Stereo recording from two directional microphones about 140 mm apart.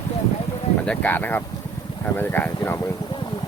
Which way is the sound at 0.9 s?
10° left (ahead or behind).